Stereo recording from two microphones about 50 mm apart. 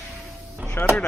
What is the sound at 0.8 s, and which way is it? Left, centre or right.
Speech, left.